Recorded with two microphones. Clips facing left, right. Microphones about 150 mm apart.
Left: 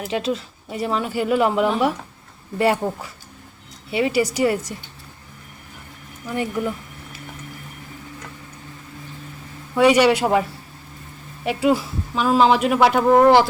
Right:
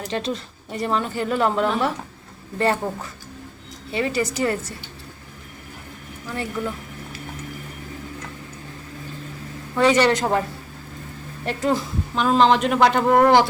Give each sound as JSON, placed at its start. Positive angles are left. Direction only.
{"t": 0.0, "sound": "speech", "side_deg": 5}
{"t": 6.2, "sound": "speech", "side_deg": 15}
{"t": 9.7, "sound": "speech", "side_deg": 10}
{"t": 11.4, "sound": "a woman's voice", "side_deg": 10}